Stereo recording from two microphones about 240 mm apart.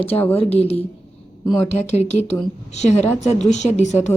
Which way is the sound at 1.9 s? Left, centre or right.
Left.